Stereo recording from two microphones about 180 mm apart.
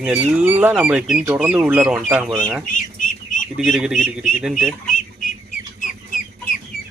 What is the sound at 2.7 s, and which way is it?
Bird, 45° left (ahead or behind).